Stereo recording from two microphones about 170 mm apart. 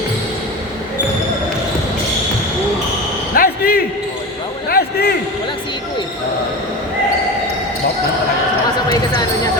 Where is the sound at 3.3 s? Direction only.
60° left (ahead or behind).